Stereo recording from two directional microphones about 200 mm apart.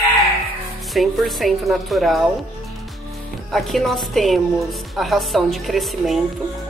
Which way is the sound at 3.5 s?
Centre (ahead or behind).